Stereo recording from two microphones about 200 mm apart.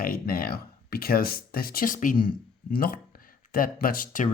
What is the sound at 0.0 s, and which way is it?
Speech, 45° left (ahead or behind).